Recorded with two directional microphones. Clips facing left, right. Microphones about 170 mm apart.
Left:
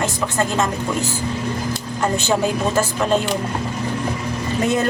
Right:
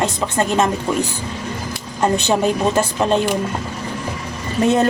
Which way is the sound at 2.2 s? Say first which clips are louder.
Right 2 dB; 20° right (ahead or behind).